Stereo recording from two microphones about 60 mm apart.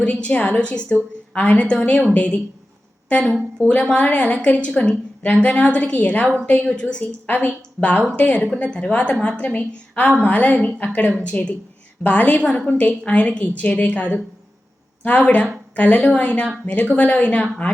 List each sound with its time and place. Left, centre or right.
0.0 s a woman's voice: left